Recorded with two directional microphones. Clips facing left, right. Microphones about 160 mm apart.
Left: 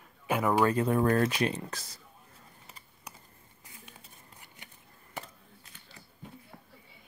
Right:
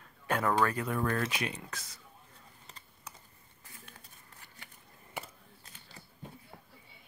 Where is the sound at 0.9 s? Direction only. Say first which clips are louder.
Left 7 dB; 40° left (ahead or behind).